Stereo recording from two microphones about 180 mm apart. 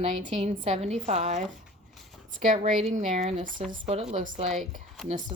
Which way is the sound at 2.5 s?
45° right (ahead or behind).